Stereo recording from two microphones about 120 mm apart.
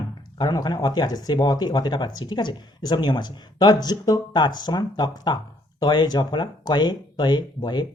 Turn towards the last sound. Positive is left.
turn(degrees=35)  # may be behind; listen again after turning